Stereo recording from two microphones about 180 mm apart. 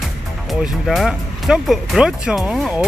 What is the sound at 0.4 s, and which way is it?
Speech, centre (ahead or behind).